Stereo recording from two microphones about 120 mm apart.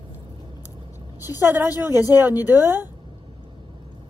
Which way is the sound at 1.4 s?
15° right (ahead or behind).